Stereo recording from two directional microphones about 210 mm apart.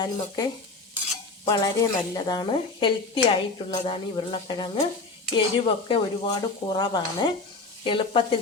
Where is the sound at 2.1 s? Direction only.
20° left (ahead or behind).